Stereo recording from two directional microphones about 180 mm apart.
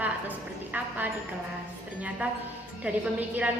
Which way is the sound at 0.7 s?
10° right (ahead or behind).